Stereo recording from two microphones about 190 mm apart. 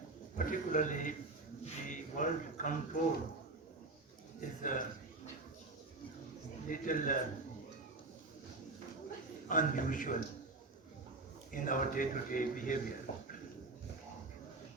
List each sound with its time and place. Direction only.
0.3 s a man's voice: 45° left (ahead or behind)
4.4 s speech: 45° left (ahead or behind)
6.7 s speech: 45° left (ahead or behind)
9.5 s speech: 45° left (ahead or behind)
11.5 s speech: 45° left (ahead or behind)